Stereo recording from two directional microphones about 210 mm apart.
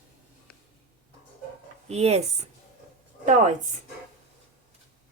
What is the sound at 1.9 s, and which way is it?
Speech, 30° right (ahead or behind).